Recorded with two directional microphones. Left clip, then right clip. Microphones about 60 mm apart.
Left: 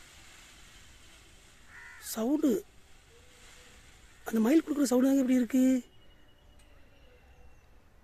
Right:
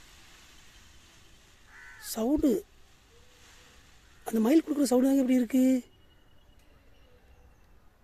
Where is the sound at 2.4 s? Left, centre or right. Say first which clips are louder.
Right 2 dB; right.